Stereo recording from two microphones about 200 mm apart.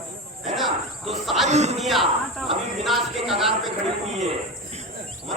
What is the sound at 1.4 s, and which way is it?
Speech, 35° right (ahead or behind).